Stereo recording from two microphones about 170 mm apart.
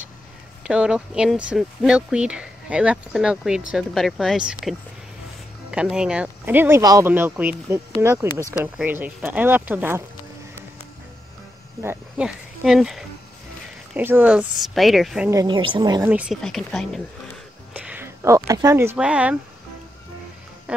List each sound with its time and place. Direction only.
0.7 s speech: 5° right (ahead or behind)
11.8 s speech: 10° right (ahead or behind)
15.2 s speech: 25° right (ahead or behind)
16.1 s speech: 5° right (ahead or behind)
17.7 s speech: 10° right (ahead or behind)